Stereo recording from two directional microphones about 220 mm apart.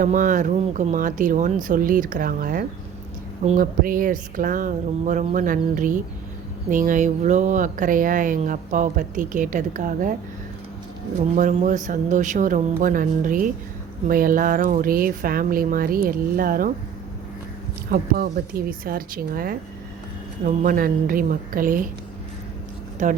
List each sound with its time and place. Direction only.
0.0 s speech: 35° right (ahead or behind)
11.3 s speech: 35° right (ahead or behind)
17.9 s speech: 45° right (ahead or behind)
23.0 s speech: 35° right (ahead or behind)